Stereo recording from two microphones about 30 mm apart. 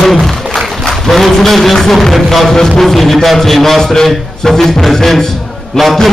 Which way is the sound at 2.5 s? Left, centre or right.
Centre.